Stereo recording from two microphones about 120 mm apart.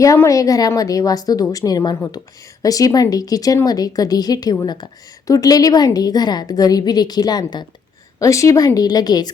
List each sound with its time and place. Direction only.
0.0 s a woman's voice: 25° left (ahead or behind)